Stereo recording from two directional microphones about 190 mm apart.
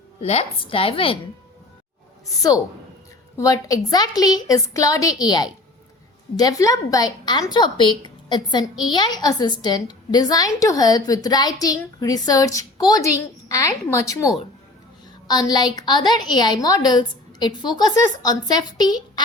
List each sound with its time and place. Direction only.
0.2 s a woman's voice: 35° left (ahead or behind)
2.2 s a woman's voice: 20° left (ahead or behind)